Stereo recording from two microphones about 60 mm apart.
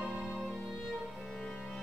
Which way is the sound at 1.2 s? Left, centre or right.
Centre.